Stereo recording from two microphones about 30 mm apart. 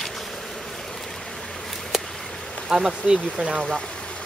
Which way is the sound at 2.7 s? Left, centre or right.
Right.